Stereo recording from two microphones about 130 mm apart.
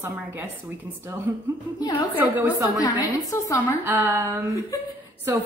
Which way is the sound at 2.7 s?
30° left (ahead or behind).